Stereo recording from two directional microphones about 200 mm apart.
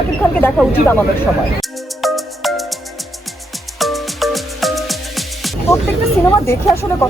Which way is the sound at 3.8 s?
Centre (ahead or behind).